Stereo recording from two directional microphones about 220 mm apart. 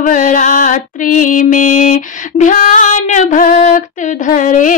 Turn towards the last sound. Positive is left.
turn(degrees=35)  # may be behind; listen again after turning